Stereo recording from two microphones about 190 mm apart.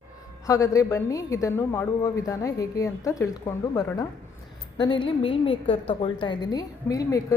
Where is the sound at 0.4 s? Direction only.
15° left (ahead or behind).